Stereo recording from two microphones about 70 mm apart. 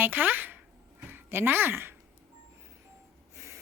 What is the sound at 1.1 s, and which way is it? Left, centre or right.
Speech, right.